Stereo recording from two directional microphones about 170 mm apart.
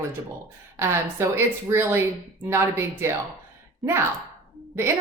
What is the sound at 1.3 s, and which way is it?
A woman's voice, 15° right (ahead or behind).